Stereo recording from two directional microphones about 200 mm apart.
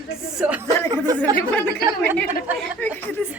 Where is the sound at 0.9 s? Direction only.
20° right (ahead or behind).